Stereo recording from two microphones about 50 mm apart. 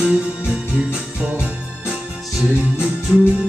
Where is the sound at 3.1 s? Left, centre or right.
Right.